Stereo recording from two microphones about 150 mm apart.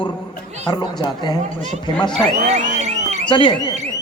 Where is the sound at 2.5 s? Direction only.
50° right (ahead or behind).